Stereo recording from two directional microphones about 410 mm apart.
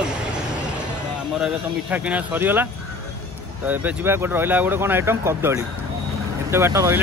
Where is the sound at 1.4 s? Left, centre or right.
Centre.